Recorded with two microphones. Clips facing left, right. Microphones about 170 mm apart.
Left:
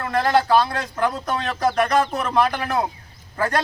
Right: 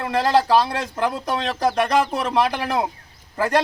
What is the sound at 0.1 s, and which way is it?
A man's voice, 30° right (ahead or behind).